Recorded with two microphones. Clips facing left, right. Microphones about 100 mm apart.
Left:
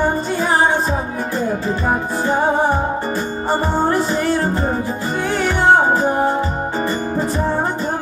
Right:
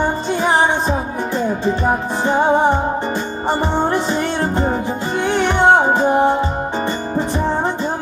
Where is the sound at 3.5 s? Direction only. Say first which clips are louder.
Even; 25° right (ahead or behind).